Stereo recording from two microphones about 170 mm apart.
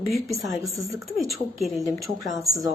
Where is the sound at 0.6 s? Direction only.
20° right (ahead or behind).